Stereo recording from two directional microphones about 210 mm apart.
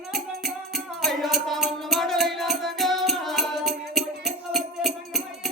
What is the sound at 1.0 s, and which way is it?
Music, centre (ahead or behind).